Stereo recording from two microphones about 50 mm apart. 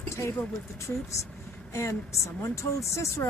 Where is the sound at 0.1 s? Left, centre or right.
Left.